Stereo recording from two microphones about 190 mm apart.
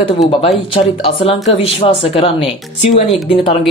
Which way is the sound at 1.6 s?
30° left (ahead or behind).